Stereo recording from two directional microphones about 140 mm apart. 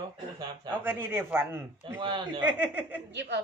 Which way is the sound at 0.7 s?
15° right (ahead or behind).